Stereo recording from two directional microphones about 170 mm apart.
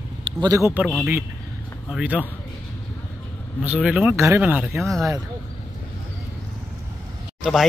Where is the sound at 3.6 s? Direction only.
5° right (ahead or behind).